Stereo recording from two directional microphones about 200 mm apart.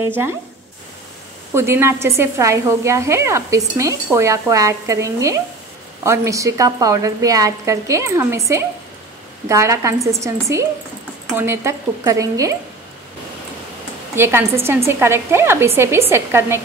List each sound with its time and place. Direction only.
0.0 s a woman's voice: 10° right (ahead or behind)
1.5 s a woman's voice: 10° right (ahead or behind)
14.1 s a woman's voice: 10° right (ahead or behind)